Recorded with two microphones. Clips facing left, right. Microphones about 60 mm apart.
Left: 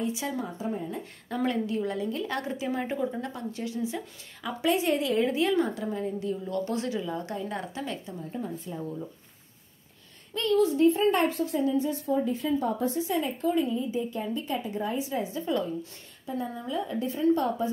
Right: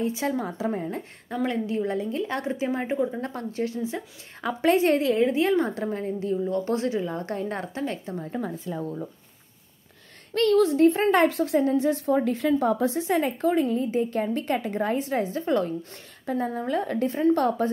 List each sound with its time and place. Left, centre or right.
0.0 s a woman's voice: right
0.6 s a woman's voice: right
1.5 s speech: right
3.2 s a woman's voice: right
8.2 s speech: right
10.3 s a woman's voice: right